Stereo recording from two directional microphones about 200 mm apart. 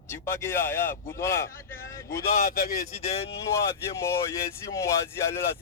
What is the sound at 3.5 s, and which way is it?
Speech, 15° left (ahead or behind).